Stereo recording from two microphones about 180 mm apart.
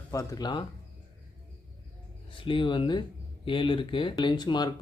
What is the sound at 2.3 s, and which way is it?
Speech, 30° left (ahead or behind).